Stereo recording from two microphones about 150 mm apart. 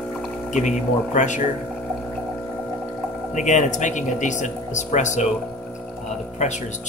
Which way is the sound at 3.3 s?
55° left (ahead or behind).